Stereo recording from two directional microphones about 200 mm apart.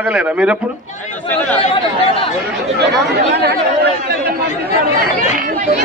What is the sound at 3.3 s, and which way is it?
Speech, 55° right (ahead or behind).